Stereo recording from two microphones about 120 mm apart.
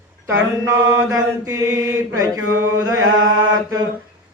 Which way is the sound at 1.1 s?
25° right (ahead or behind).